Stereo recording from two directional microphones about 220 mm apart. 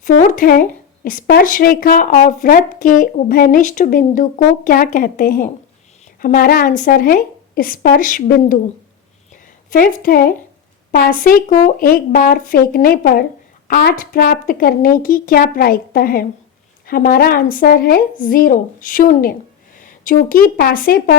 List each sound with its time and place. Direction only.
0.0 s speech: 40° left (ahead or behind)
9.6 s speech: 40° left (ahead or behind)